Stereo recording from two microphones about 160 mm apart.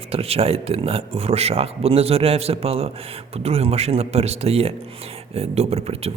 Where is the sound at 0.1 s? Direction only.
40° right (ahead or behind).